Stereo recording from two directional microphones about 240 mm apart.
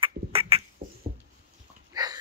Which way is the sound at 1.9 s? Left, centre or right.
Centre.